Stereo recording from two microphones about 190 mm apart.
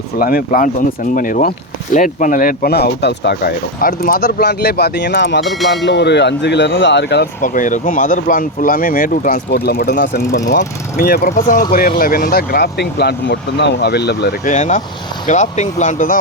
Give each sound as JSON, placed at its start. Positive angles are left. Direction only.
{"t": 0.2, "sound": "speech", "side_deg": 50}
{"t": 5.5, "sound": "speech", "side_deg": 0}
{"t": 5.8, "sound": "speech", "side_deg": 65}
{"t": 7.4, "sound": "speech", "side_deg": 45}
{"t": 14.4, "sound": "speech", "side_deg": 40}